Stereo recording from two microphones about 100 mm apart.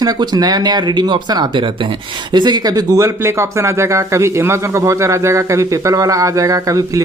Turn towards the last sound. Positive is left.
turn(degrees=-35)  # may be behind; listen again after turning